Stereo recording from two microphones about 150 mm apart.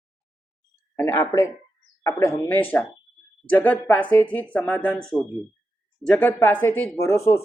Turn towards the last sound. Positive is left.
turn(degrees=15)  # may be behind; listen again after turning